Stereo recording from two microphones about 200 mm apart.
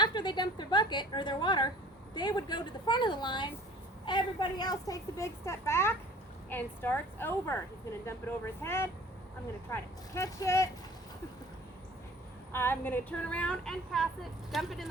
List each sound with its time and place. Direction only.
0.0 s a woman's voice: 20° left (ahead or behind)
12.5 s a child's voice: 10° left (ahead or behind)